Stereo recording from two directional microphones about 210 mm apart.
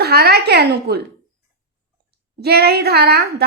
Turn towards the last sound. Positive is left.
turn(degrees=-50)  # may be behind; listen again after turning